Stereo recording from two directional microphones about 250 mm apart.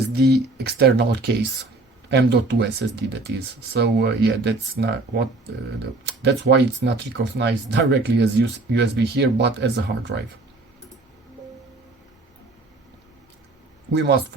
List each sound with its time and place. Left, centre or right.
0.1 s speech: right
13.9 s speech: right